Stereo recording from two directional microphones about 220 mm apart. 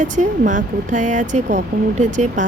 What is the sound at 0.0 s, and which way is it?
Speech, 35° right (ahead or behind).